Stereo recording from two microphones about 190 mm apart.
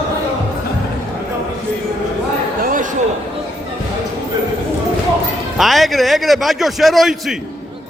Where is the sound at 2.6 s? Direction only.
45° right (ahead or behind).